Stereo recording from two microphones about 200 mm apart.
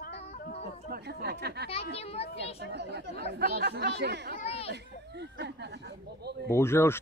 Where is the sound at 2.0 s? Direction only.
30° left (ahead or behind).